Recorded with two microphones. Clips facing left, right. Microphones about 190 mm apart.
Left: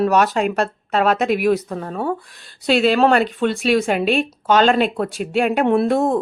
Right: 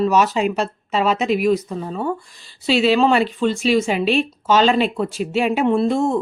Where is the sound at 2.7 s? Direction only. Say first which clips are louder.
Left 1 dB; 50° left (ahead or behind).